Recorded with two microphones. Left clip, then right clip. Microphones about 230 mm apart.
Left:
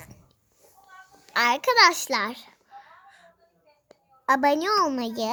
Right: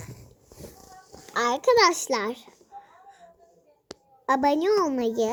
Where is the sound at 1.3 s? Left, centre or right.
Left.